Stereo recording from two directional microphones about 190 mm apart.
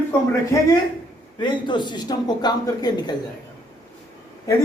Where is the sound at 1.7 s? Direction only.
25° left (ahead or behind).